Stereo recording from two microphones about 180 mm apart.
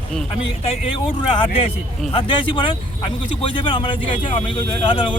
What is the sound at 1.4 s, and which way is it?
Speech, 30° left (ahead or behind).